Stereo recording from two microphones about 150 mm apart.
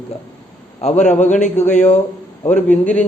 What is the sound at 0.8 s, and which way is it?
A man's voice, 50° left (ahead or behind).